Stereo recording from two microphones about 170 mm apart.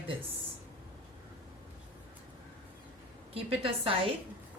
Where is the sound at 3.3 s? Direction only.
35° right (ahead or behind).